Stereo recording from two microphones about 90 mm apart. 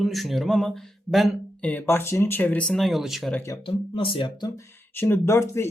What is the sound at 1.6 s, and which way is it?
Speech, 15° left (ahead or behind).